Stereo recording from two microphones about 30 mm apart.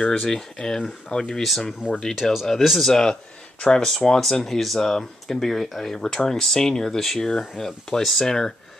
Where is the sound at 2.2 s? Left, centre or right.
Centre.